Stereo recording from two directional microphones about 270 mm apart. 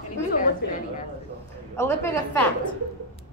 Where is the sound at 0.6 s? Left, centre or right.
Left.